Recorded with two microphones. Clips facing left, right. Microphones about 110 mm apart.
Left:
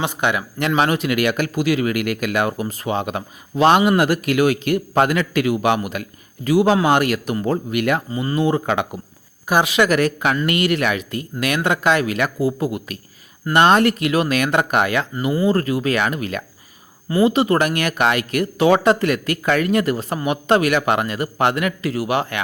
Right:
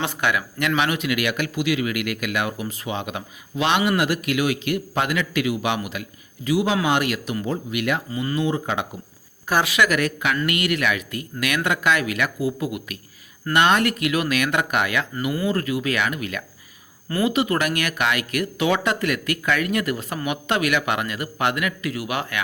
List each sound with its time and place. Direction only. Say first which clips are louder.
0.0 s speech: left 3 dB; 20° left (ahead or behind); by 8.0 s 45° left (ahead or behind)
8.1 s speech: left 3 dB; 30° left (ahead or behind)
8.4 s speech: left 6 dB; 55° left (ahead or behind)
9.5 s speech: left 4 dB; 15° left (ahead or behind)
9.7 s speech: left 4 dB; 30° left (ahead or behind)